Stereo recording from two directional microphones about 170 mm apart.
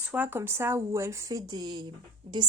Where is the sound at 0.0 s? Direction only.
10° right (ahead or behind).